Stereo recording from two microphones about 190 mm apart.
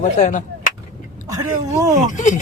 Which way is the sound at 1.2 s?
15° right (ahead or behind).